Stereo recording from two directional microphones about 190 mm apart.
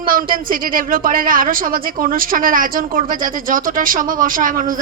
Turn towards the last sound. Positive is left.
turn(degrees=-45)  # may be behind; listen again after turning